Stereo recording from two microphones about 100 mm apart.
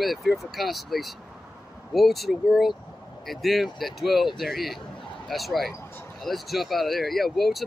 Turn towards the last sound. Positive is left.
turn(degrees=0)  # may be behind; listen again after turning